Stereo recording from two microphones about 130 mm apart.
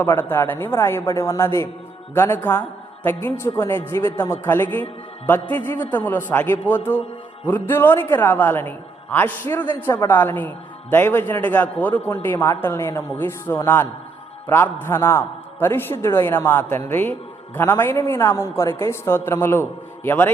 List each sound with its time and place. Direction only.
0.0 s a man's voice: 15° left (ahead or behind)